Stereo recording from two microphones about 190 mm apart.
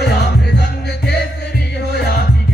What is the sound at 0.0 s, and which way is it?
Music, 60° left (ahead or behind).